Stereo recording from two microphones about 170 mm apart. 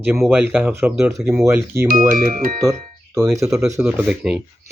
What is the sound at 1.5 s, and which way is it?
Speech, 15° right (ahead or behind).